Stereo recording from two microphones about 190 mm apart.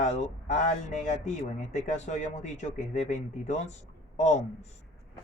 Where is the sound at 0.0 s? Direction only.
40° left (ahead or behind).